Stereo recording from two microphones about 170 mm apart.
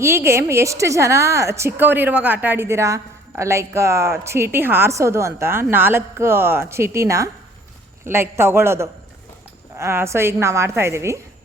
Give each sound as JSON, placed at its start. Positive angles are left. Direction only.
{"t": 0.0, "sound": "a woman's voice", "side_deg": -15}